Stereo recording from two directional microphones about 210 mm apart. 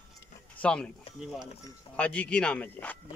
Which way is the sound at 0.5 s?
5° left (ahead or behind).